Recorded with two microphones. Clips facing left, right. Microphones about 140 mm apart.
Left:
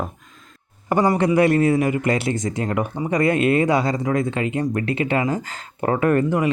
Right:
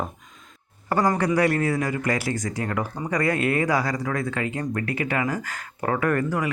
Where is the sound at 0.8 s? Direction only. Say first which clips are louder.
Left 4 dB; 15° left (ahead or behind).